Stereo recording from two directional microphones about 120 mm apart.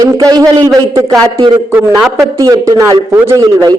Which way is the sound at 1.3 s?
45° right (ahead or behind).